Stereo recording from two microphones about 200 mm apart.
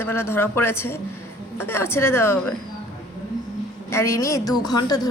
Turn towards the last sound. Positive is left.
turn(degrees=20)  # may be behind; listen again after turning